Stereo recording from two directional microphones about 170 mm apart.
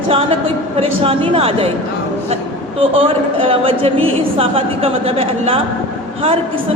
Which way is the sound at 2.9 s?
35° right (ahead or behind).